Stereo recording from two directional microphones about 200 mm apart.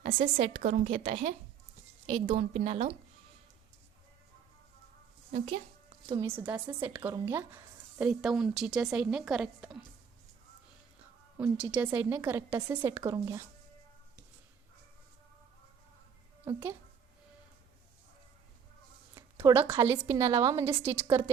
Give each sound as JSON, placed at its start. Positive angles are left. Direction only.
{"t": 0.0, "sound": "a woman's voice", "side_deg": -30}
{"t": 6.1, "sound": "speech", "side_deg": -15}
{"t": 11.3, "sound": "a woman's voice", "side_deg": -5}
{"t": 16.5, "sound": "a woman's voice", "side_deg": -15}
{"t": 19.1, "sound": "a woman's voice", "side_deg": -10}